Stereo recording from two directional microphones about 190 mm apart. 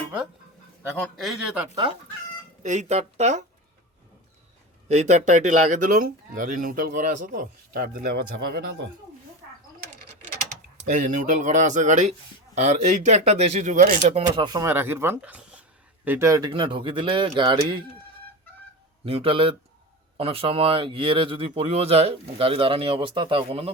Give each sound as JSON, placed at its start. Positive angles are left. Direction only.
{"t": 0.9, "sound": "a man's voice", "side_deg": 10}
{"t": 1.7, "sound": "speech", "side_deg": -25}
{"t": 2.6, "sound": "speech", "side_deg": -40}
{"t": 4.9, "sound": "speech", "side_deg": -35}
{"t": 10.5, "sound": "speech", "side_deg": -40}
{"t": 14.3, "sound": "speech", "side_deg": -20}
{"t": 16.5, "sound": "speech", "side_deg": -25}
{"t": 19.0, "sound": "speech", "side_deg": -30}